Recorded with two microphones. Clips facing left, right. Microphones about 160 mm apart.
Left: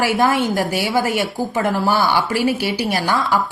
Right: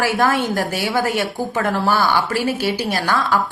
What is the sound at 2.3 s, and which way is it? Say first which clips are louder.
Speech: left 1 dB; 50° right (ahead or behind).